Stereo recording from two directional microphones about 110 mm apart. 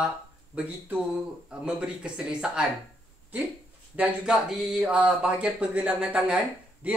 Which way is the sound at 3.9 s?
10° right (ahead or behind).